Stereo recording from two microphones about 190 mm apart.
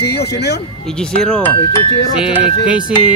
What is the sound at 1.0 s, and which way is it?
Speech, 5° left (ahead or behind).